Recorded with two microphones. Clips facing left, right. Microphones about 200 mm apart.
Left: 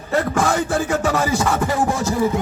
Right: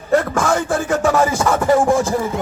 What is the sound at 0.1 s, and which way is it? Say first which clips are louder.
Music: right 3 dB; 50° right (ahead or behind).